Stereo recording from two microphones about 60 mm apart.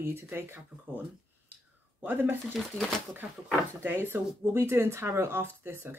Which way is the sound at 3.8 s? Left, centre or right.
Right.